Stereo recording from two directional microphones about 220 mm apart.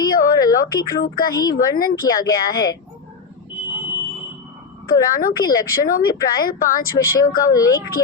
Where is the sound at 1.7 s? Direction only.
40° left (ahead or behind).